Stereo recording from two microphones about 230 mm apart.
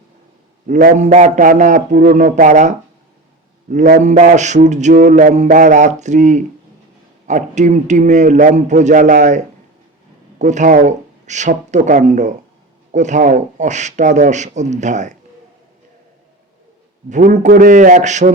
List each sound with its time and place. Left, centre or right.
0.7 s mantra: right
10.3 s speech: right
12.9 s mantra: right
17.1 s mantra: right